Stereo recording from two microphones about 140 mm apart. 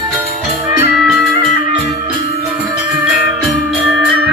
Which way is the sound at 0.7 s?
20° right (ahead or behind).